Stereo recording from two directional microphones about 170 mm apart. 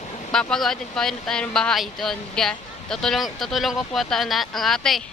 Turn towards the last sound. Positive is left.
turn(degrees=0)  # may be behind; listen again after turning